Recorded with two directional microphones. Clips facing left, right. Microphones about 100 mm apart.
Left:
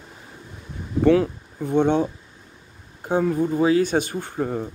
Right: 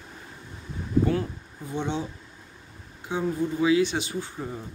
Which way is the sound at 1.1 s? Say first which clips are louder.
Left 10 dB; 90° left.